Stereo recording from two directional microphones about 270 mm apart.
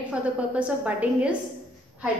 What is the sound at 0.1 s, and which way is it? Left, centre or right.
A woman's voice, centre.